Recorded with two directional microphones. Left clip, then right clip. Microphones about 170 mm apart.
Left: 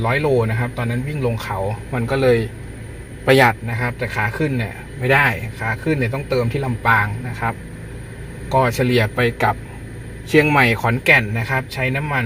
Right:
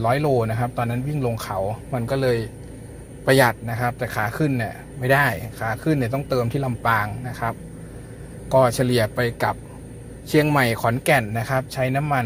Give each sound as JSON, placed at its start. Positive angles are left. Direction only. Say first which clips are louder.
{"t": 0.0, "sound": "speech", "louder": "left 2 dB", "side_deg": -20}
{"t": 3.8, "sound": "speech", "louder": "left 2 dB", "side_deg": -20}
{"t": 9.2, "sound": "speech", "louder": "left 5 dB", "side_deg": 0}
{"t": 10.3, "sound": "speech", "louder": "left 5 dB", "side_deg": -10}